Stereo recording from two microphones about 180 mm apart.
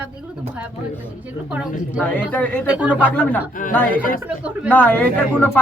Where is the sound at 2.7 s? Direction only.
5° right (ahead or behind).